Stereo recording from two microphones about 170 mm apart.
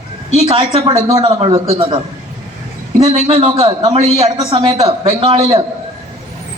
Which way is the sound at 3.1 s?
35° right (ahead or behind).